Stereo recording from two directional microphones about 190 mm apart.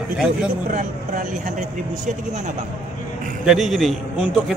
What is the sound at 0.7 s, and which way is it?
Speech, 45° right (ahead or behind).